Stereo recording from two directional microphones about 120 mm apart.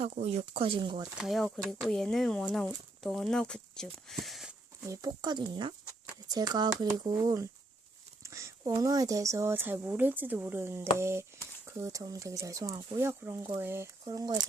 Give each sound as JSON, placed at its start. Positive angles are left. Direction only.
{"t": 0.0, "sound": "speech", "side_deg": -65}
{"t": 1.2, "sound": "speech", "side_deg": 0}
{"t": 4.9, "sound": "speech", "side_deg": -35}
{"t": 14.1, "sound": "speech", "side_deg": -35}